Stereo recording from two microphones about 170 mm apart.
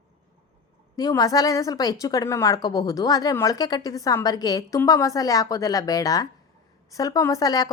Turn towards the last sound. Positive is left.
turn(degrees=20)  # may be behind; listen again after turning